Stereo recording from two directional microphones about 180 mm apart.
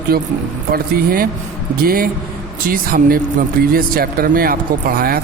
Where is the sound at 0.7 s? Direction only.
55° right (ahead or behind).